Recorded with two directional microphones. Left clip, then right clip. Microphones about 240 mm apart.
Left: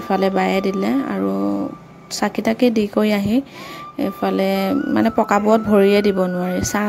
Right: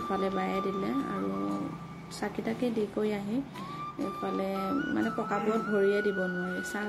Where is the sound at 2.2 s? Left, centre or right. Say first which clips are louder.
Left 15 dB; left.